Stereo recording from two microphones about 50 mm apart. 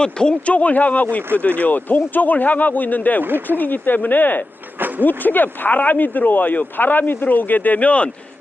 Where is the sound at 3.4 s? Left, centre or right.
Left.